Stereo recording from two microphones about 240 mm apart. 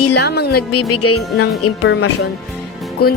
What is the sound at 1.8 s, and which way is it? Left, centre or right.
Music, left.